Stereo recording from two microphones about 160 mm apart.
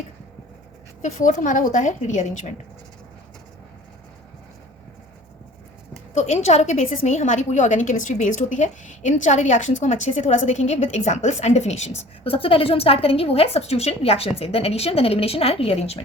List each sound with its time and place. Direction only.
1.0 s a woman's voice: 45° left (ahead or behind)
6.1 s a woman's voice: 45° left (ahead or behind)